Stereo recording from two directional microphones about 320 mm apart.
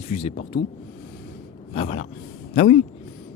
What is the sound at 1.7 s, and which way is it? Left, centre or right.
Speech, centre.